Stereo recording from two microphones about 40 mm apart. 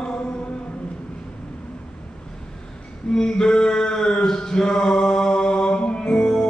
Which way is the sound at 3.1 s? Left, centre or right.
Centre.